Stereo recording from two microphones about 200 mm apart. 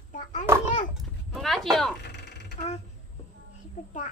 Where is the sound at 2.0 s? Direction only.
60° left (ahead or behind).